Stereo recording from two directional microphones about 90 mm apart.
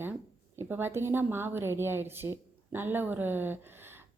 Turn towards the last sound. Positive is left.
turn(degrees=-25)  # may be behind; listen again after turning